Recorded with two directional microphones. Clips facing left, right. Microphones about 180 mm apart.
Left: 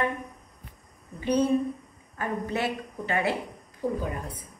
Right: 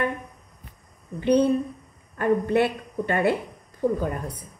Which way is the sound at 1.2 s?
60° right (ahead or behind).